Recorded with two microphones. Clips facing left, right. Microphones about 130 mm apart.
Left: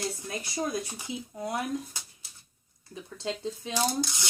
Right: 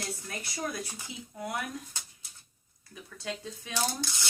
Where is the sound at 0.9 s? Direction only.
20° left (ahead or behind).